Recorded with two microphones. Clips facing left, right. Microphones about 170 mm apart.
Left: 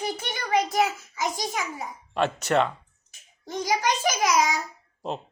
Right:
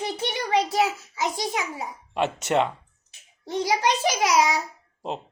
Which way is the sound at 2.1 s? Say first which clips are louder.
Even; 20° right (ahead or behind).